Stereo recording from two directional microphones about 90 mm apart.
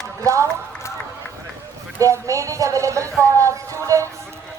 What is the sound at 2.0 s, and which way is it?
Speech, 35° right (ahead or behind).